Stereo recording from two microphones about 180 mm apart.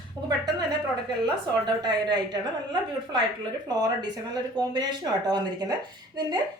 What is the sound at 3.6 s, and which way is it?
Speech, 20° right (ahead or behind).